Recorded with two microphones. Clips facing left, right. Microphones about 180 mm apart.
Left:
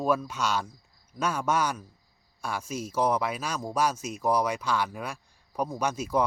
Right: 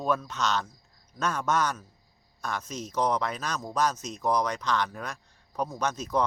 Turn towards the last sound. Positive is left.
turn(degrees=10)  # may be behind; listen again after turning